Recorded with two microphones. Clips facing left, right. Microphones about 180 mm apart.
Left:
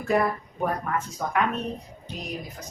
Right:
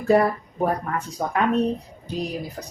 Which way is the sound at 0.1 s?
35° right (ahead or behind).